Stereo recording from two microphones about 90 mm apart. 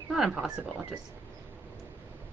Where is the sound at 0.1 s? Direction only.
5° right (ahead or behind).